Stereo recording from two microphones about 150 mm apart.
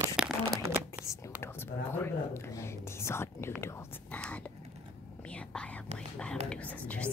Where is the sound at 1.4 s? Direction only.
15° left (ahead or behind).